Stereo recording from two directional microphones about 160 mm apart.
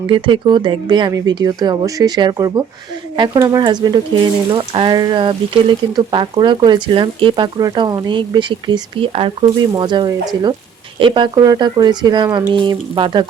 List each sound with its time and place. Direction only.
0.1 s speech: 30° right (ahead or behind)